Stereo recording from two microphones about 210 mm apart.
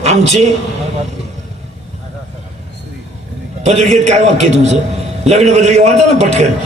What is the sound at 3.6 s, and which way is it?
Speech, 30° right (ahead or behind).